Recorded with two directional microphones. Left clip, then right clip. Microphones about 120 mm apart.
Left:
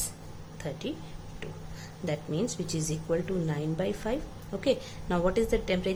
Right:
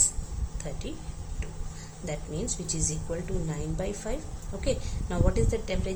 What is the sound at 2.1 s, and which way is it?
A woman's voice, 45° left (ahead or behind).